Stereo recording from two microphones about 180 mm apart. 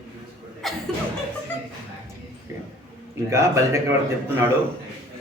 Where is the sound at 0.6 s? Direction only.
Centre (ahead or behind).